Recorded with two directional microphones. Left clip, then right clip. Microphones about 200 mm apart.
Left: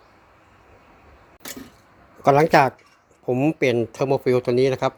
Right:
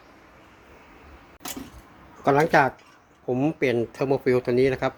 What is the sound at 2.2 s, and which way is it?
Speech, 45° left (ahead or behind).